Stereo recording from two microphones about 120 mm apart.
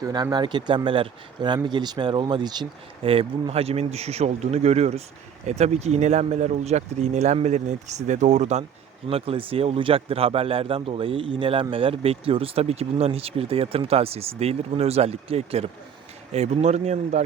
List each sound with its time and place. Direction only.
0.0 s speech: 35° right (ahead or behind); by 8.6 s 70° right (ahead or behind)
9.0 s speech: 55° right (ahead or behind); by 17.2 s 70° right (ahead or behind)